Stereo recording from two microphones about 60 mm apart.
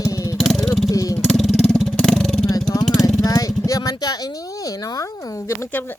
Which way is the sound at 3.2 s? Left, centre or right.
Left.